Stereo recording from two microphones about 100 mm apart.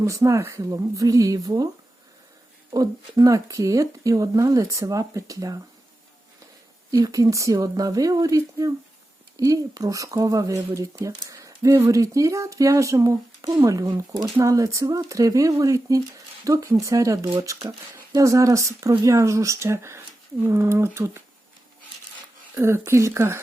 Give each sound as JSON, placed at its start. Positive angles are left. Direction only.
{"t": 0.0, "sound": "speech", "side_deg": -30}
{"t": 2.7, "sound": "speech", "side_deg": -35}
{"t": 6.9, "sound": "speech", "side_deg": -35}
{"t": 22.6, "sound": "speech", "side_deg": -25}